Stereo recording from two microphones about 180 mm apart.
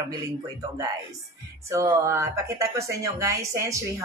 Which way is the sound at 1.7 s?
15° right (ahead or behind).